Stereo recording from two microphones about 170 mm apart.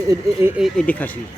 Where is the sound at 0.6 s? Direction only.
5° left (ahead or behind).